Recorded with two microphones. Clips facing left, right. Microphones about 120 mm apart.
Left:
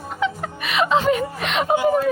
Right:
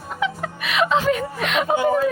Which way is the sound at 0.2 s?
Centre (ahead or behind).